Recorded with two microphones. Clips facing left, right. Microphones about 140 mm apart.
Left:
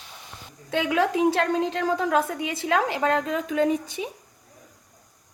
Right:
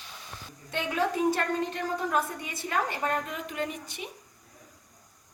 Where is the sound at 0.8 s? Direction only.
90° left.